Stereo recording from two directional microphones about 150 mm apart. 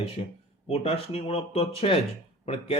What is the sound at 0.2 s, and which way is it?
Speech, 40° left (ahead or behind).